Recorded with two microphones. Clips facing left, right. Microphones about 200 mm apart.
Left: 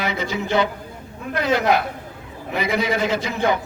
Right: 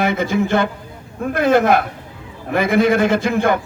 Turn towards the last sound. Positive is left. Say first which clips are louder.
# right 5 dB
turn(degrees=-50)  # may be behind; listen again after turning